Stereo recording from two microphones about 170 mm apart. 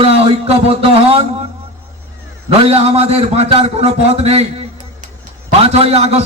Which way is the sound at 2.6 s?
35° right (ahead or behind).